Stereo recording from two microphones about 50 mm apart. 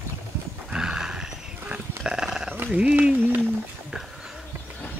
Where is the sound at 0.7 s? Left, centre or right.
Centre.